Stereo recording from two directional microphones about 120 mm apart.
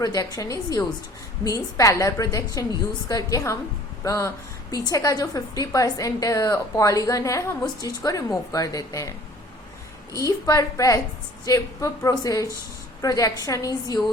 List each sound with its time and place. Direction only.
0.0 s a woman's voice: 35° left (ahead or behind)